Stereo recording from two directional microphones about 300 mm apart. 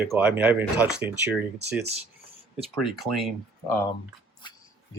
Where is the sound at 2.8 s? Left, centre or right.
Centre.